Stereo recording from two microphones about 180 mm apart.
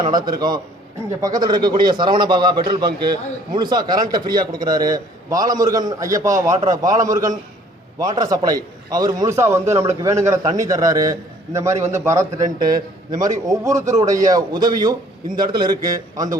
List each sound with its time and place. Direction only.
0.0 s a man's voice: 25° right (ahead or behind)
12.5 s a man's voice: 50° right (ahead or behind)
13.1 s a man's voice: 20° right (ahead or behind)